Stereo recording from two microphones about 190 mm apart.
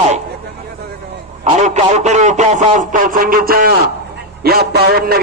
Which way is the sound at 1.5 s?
35° right (ahead or behind).